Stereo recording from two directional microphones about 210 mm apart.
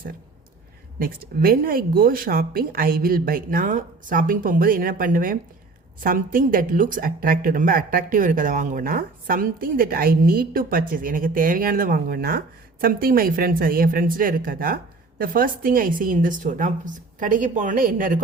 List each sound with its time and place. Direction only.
0.9 s a woman's voice: 45° right (ahead or behind)